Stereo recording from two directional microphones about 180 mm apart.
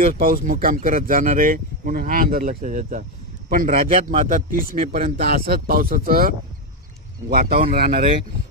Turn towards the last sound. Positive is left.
turn(degrees=-55)  # may be behind; listen again after turning